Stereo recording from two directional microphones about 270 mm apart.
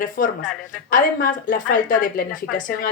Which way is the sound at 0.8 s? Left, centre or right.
Left.